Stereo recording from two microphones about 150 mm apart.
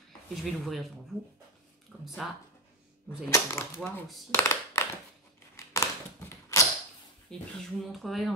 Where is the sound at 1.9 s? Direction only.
Centre (ahead or behind).